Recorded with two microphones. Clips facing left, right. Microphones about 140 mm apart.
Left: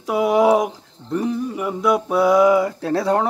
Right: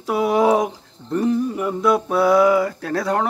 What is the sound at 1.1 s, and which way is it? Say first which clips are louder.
Speech: right 3 dB; 5° left (ahead or behind).